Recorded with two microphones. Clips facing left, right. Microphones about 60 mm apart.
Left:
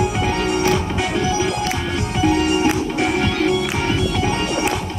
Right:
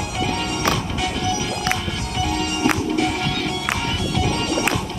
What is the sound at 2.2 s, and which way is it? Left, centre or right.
Music, left.